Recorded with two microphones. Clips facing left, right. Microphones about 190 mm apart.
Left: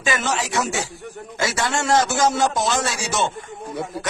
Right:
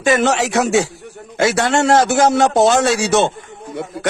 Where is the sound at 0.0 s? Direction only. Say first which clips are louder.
Right 9 dB; 60° right (ahead or behind).